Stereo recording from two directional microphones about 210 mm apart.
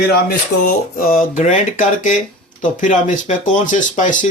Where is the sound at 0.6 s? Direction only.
40° left (ahead or behind).